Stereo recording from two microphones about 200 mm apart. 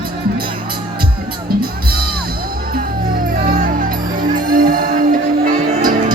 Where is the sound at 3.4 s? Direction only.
45° right (ahead or behind).